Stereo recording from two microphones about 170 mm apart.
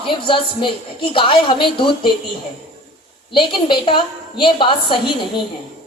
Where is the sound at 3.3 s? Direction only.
30° left (ahead or behind).